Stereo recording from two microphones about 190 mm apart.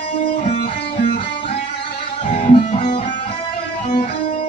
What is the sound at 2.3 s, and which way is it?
Music, 30° left (ahead or behind).